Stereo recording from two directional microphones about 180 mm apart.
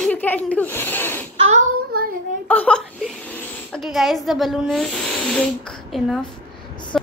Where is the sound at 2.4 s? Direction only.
10° left (ahead or behind).